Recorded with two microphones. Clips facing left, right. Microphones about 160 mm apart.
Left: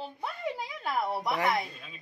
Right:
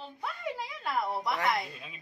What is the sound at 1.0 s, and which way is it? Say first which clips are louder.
Speech: left 2 dB; 10° left (ahead or behind).